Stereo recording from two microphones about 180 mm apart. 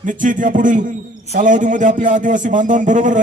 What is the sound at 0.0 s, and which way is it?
A man's voice, 45° right (ahead or behind).